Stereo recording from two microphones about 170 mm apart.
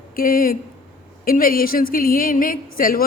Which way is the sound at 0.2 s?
60° left (ahead or behind).